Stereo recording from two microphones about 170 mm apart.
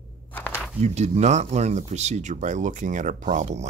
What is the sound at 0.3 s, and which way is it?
Walk, 10° left (ahead or behind).